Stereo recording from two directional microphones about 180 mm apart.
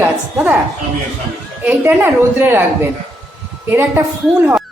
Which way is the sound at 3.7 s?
10° right (ahead or behind).